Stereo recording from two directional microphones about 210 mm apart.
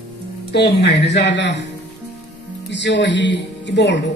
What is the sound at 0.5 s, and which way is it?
Speech, 55° left (ahead or behind).